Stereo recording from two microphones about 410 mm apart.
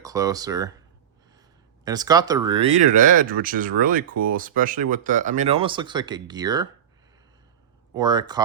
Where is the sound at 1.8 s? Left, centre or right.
Centre.